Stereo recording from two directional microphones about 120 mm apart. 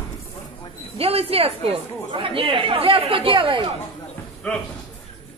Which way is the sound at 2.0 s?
45° right (ahead or behind).